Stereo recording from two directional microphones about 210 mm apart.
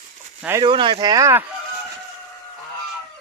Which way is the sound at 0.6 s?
25° right (ahead or behind).